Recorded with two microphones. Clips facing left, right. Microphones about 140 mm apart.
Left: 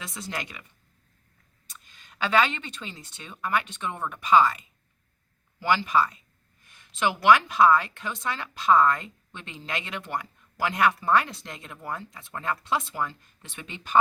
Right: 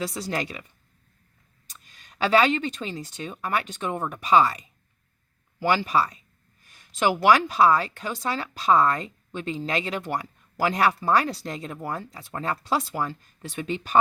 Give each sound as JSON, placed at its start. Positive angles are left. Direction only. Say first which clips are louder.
{"t": 0.0, "sound": "speech", "louder": "right 7 dB", "side_deg": -35}
{"t": 2.4, "sound": "speech", "louder": "right 4 dB", "side_deg": -40}